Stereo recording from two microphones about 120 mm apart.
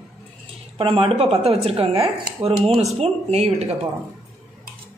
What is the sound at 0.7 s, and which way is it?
Speech, 50° right (ahead or behind).